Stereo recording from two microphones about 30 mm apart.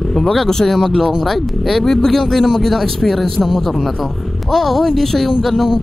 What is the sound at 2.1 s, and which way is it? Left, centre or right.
Speech, centre.